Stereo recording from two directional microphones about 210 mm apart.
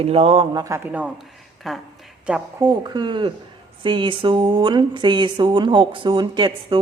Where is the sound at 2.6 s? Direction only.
20° right (ahead or behind).